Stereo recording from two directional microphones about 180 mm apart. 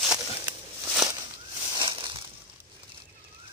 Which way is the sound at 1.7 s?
25° right (ahead or behind).